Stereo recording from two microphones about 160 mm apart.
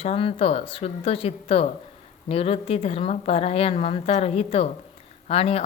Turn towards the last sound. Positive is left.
turn(degrees=40)  # may be behind; listen again after turning